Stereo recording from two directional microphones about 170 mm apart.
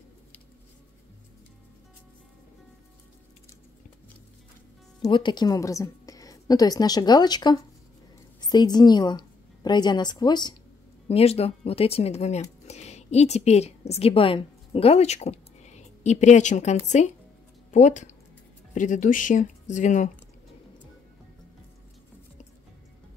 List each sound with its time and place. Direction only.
5.0 s a woman's voice: 25° left (ahead or behind)
11.1 s speech: 35° left (ahead or behind)